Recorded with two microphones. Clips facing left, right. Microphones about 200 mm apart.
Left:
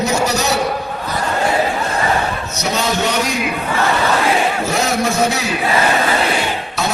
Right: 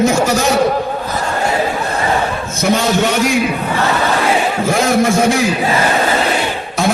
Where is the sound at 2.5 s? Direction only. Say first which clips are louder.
Right 7 dB; 50° right (ahead or behind).